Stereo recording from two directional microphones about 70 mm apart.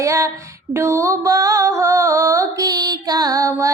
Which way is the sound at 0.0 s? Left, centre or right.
Right.